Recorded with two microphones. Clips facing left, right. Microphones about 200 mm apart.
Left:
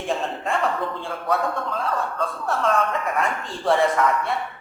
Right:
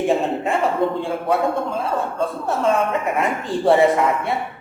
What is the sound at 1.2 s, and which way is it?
A man's voice, 25° right (ahead or behind).